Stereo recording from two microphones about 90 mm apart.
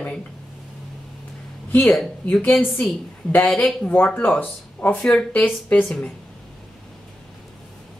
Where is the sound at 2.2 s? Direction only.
15° left (ahead or behind).